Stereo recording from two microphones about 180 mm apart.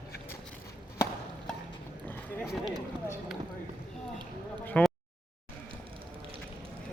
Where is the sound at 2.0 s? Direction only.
10° left (ahead or behind).